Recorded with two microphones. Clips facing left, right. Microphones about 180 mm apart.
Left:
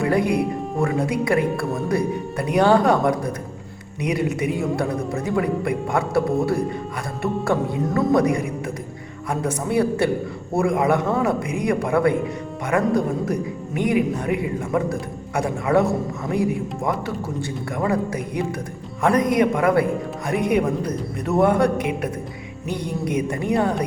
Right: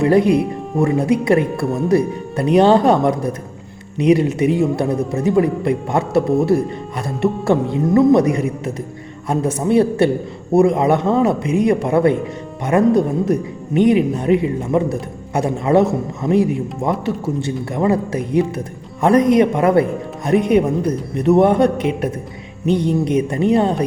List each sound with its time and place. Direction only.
0.0 s a man's voice: 25° right (ahead or behind)